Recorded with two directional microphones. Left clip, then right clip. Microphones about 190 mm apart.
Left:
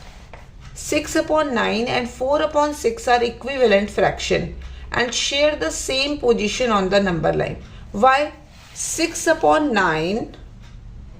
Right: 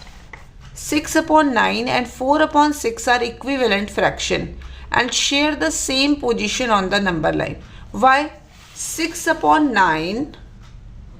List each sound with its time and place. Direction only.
0.8 s speech: 20° right (ahead or behind)
9.0 s a woman's voice: 10° right (ahead or behind)